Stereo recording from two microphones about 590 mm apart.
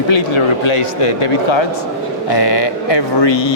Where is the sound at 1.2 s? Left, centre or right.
Left.